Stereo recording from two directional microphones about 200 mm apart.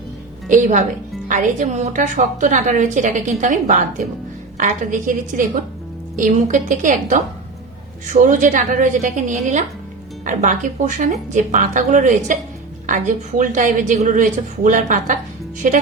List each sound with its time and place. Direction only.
0.4 s a woman's voice: 40° right (ahead or behind)